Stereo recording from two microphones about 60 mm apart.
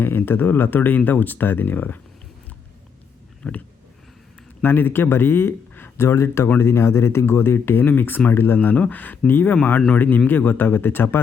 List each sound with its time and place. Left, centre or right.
0.0 s speech: left
3.4 s a sound: centre
4.6 s speech: left